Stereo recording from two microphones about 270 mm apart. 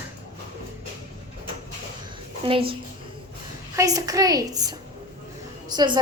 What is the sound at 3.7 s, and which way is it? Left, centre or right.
A woman's voice, centre.